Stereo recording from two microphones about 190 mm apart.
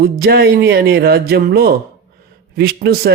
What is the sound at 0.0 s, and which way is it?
A man's voice, 55° right (ahead or behind).